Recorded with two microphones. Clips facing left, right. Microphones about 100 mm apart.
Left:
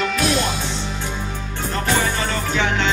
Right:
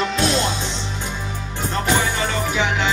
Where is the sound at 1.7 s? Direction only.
20° right (ahead or behind).